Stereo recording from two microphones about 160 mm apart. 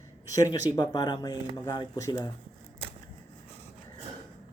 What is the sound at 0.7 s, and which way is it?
Speech, 25° left (ahead or behind).